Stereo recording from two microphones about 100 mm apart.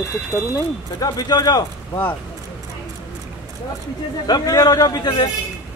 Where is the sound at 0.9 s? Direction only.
40° left (ahead or behind).